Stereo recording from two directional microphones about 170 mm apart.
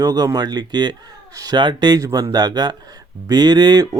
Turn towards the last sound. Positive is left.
turn(degrees=-25)  # may be behind; listen again after turning